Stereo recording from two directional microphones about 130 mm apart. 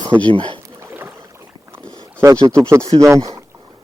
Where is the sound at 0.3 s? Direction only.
40° right (ahead or behind).